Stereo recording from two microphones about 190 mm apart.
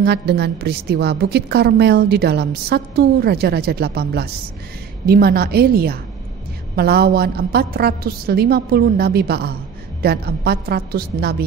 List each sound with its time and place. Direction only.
0.0 s a woman's voice: 60° right (ahead or behind)